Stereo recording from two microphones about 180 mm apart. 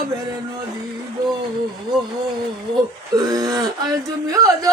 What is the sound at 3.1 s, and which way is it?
Speech, 20° right (ahead or behind).